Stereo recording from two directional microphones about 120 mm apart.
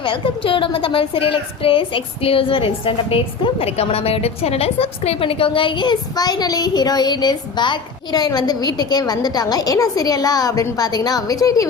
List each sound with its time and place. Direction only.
0.0 s a woman's voice: 45° left (ahead or behind); by 11.7 s 30° left (ahead or behind)